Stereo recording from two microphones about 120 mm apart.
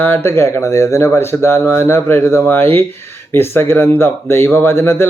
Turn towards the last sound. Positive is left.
turn(degrees=20)  # may be behind; listen again after turning